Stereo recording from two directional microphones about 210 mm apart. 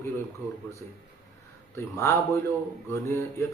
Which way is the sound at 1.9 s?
15° left (ahead or behind).